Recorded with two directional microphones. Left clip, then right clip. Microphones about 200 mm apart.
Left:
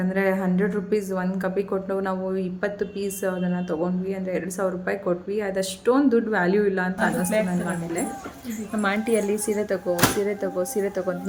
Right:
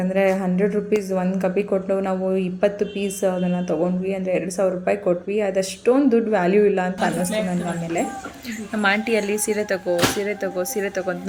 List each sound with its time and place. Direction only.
0.1 s a woman's voice: 5° right (ahead or behind)
8.8 s a woman's voice: centre (ahead or behind)